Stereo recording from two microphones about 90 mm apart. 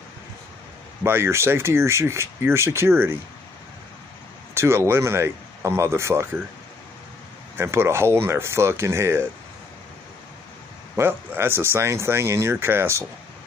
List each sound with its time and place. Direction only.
1.0 s speech: 25° right (ahead or behind)
4.6 s speech: 30° right (ahead or behind)
7.5 s speech: 30° right (ahead or behind)
11.0 s speech: 25° right (ahead or behind)